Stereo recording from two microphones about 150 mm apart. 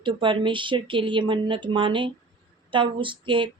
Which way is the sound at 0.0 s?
35° right (ahead or behind).